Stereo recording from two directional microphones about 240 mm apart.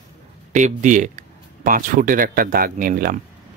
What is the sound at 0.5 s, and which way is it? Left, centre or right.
Speech, right.